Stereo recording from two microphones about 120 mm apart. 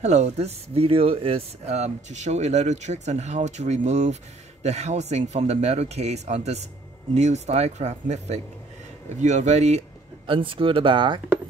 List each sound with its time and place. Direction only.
0.0 s speech: 70° right (ahead or behind); by 1.4 s 50° right (ahead or behind)
1.7 s speech: 70° right (ahead or behind)
10.2 s speech: 45° right (ahead or behind)